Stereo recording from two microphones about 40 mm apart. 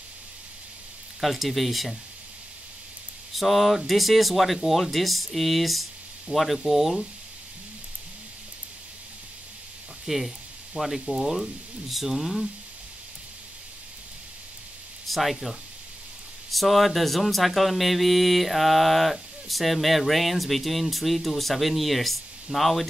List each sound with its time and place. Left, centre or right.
1.2 s speech: centre
3.3 s speech: centre
10.0 s speech: centre
10.8 s speech: right
11.1 s speech: centre
15.0 s speech: centre